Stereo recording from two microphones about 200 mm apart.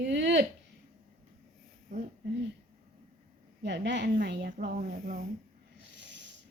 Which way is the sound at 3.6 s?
60° right (ahead or behind).